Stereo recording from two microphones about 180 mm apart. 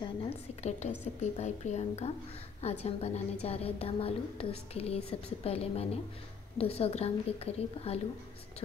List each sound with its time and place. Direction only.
0.0 s a woman's voice: 30° left (ahead or behind)